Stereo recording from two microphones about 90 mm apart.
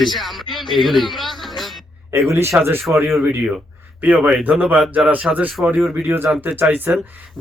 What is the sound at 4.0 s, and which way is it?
Speech, 15° right (ahead or behind).